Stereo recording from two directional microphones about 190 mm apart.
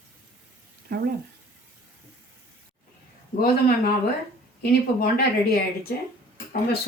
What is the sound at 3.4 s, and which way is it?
Speech, 50° left (ahead or behind).